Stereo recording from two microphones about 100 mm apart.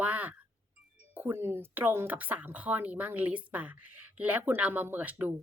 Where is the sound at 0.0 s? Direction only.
15° right (ahead or behind).